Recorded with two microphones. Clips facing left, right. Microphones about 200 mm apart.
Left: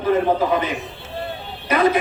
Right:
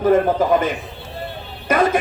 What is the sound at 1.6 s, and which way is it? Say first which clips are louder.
Music: right 1 dB; 45° right (ahead or behind).